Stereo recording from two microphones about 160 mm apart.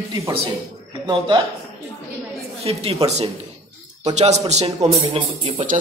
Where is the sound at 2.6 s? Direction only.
40° right (ahead or behind).